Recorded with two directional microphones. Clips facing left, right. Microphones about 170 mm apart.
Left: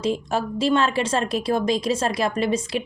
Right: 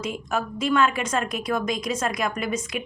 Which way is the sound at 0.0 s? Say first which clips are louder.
Left 4 dB; 30° left (ahead or behind).